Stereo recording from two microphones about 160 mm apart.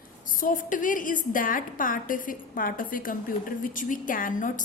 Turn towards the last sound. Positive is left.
turn(degrees=55)  # may be behind; listen again after turning